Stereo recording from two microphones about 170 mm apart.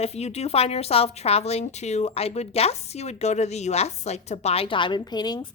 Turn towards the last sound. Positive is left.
turn(degrees=25)  # may be behind; listen again after turning